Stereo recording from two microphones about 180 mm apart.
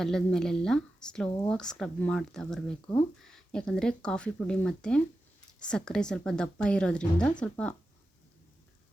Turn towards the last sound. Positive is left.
turn(degrees=5)  # may be behind; listen again after turning